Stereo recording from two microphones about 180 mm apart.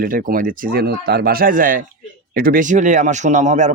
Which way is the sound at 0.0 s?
50° right (ahead or behind).